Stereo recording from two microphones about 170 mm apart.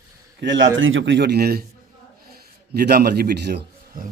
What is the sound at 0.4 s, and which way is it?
A man's voice, 90° right.